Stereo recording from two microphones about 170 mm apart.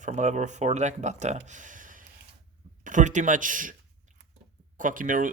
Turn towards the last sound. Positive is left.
turn(degrees=-50)  # may be behind; listen again after turning